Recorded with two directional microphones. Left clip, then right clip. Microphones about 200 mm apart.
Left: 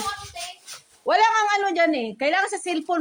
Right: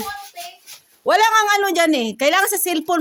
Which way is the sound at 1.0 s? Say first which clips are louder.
Right 4 dB; 60° right (ahead or behind).